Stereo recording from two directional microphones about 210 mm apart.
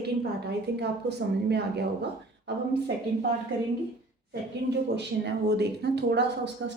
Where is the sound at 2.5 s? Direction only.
55° right (ahead or behind).